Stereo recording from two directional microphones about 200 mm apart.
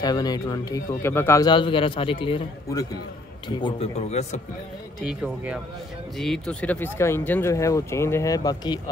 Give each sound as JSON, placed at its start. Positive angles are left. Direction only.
{"t": 0.0, "sound": "speech", "side_deg": 20}
{"t": 5.0, "sound": "speech", "side_deg": -5}